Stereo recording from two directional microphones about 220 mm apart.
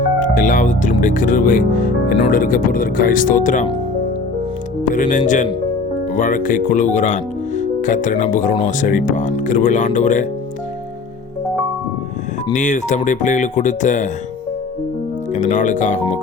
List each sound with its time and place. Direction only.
0.2 s speech: 35° left (ahead or behind)
4.9 s speech: 35° left (ahead or behind)
12.5 s speech: 35° left (ahead or behind)
15.3 s speech: 35° left (ahead or behind)